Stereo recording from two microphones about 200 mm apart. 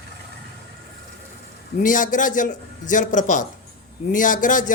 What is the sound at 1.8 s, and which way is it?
Speech, 40° left (ahead or behind).